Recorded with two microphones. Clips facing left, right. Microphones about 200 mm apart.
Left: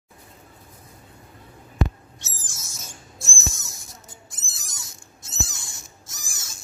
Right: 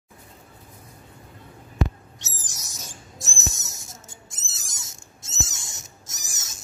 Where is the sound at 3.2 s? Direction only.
20° right (ahead or behind).